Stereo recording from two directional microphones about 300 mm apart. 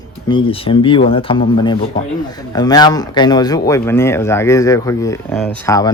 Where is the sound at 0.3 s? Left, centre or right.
Centre.